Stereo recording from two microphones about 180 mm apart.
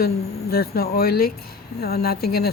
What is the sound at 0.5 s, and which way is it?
Speech, 60° left (ahead or behind).